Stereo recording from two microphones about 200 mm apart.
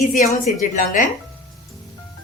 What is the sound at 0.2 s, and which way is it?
Speech, 40° left (ahead or behind).